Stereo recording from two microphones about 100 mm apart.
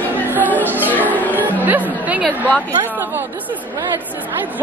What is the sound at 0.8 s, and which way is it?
Speech, 15° left (ahead or behind).